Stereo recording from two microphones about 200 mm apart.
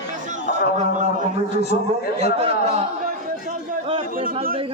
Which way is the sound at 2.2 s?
30° right (ahead or behind).